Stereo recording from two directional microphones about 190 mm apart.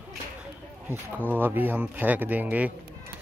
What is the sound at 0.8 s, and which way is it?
Speech, 10° right (ahead or behind).